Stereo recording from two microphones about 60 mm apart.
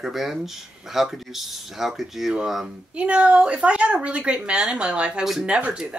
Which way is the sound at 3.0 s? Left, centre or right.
Centre.